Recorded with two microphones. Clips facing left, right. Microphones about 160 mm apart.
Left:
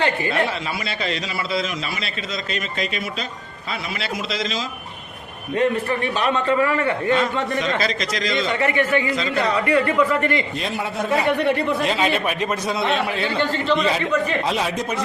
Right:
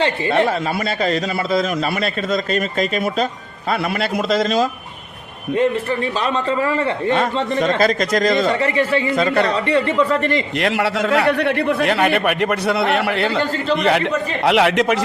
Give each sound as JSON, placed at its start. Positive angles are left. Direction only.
{"t": 0.0, "sound": "a man's voice", "side_deg": -30}
{"t": 0.4, "sound": "a man's voice", "side_deg": -45}
{"t": 5.5, "sound": "a man's voice", "side_deg": -30}
{"t": 7.6, "sound": "a man's voice", "side_deg": -45}
{"t": 9.1, "sound": "a man's voice", "side_deg": -60}
{"t": 9.5, "sound": "a man's voice", "side_deg": -30}
{"t": 10.6, "sound": "a man's voice", "side_deg": -85}
{"t": 13.4, "sound": "a man's voice", "side_deg": -45}
{"t": 13.7, "sound": "a man's voice", "side_deg": -65}